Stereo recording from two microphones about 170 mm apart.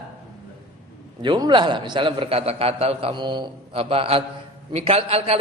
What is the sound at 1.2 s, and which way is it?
A man's voice, 25° right (ahead or behind).